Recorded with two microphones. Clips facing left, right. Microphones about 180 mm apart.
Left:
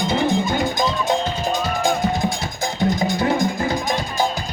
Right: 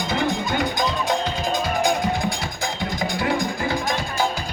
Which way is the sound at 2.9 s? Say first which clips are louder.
Left 4 dB; 25° left (ahead or behind).